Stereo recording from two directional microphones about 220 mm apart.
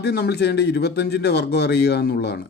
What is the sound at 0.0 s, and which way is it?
Speech, 50° left (ahead or behind).